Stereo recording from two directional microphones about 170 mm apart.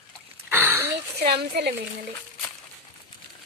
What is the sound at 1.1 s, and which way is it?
Speech, 70° right (ahead or behind).